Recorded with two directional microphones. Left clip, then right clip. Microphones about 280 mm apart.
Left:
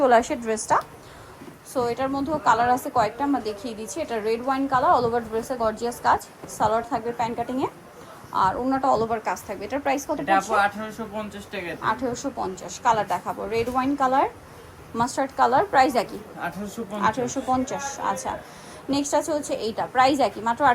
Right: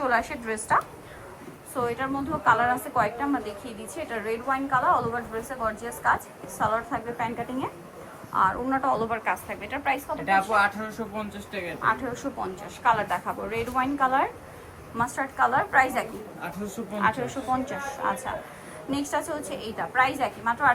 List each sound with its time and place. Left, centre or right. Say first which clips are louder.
0.0 s a woman's voice: left 7 dB; centre
10.2 s speech: left 1 dB; centre
11.8 s a woman's voice: even; centre
16.4 s speech: left 4 dB; centre
17.0 s a woman's voice: left 2 dB; left